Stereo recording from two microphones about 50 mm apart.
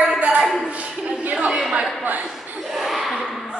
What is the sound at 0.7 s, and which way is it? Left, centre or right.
Speech, right.